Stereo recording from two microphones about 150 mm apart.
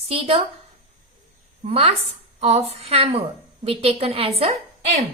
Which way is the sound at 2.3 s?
45° right (ahead or behind).